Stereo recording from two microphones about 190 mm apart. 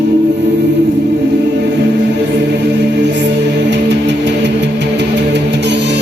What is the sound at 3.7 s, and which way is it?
Music, 65° right (ahead or behind).